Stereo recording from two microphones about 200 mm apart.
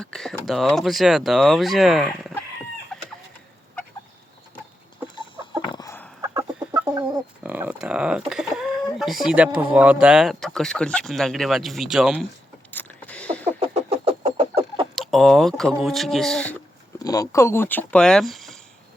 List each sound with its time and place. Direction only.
0.0 s speech: 5° left (ahead or behind)
2.9 s chicken: centre (ahead or behind)
5.1 s chicken: 25° left (ahead or behind)
6.2 s chicken: 20° right (ahead or behind)
7.4 s a sound: 10° right (ahead or behind)
8.3 s speech: 5° right (ahead or behind)
12.7 s a sound: 5° left (ahead or behind)
13.6 s a sound: 30° right (ahead or behind)
14.9 s speech: centre (ahead or behind)
17.0 s speech: 15° left (ahead or behind); by 18.6 s centre (ahead or behind)